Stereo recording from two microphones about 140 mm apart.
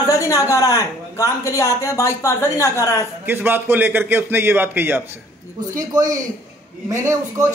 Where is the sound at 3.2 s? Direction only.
15° right (ahead or behind).